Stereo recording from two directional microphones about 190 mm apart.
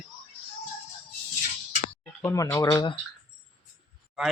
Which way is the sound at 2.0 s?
5° left (ahead or behind).